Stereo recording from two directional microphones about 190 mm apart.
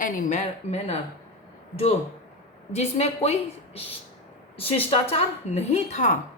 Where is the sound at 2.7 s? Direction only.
35° left (ahead or behind).